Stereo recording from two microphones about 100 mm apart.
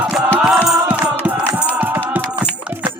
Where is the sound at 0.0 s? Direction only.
10° right (ahead or behind).